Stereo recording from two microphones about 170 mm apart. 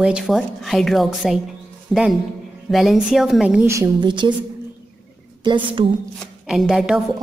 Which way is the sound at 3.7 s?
20° right (ahead or behind).